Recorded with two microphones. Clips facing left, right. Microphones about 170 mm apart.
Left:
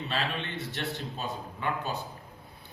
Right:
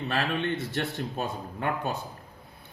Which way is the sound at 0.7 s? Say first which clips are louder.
Right 4 dB; 50° right (ahead or behind).